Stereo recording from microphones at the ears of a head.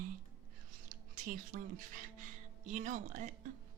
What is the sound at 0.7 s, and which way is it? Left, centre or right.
Speech, right.